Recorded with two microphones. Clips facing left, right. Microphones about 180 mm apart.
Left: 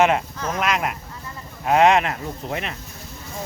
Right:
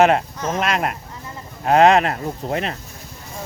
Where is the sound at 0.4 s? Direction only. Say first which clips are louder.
Right 1 dB; 30° right (ahead or behind).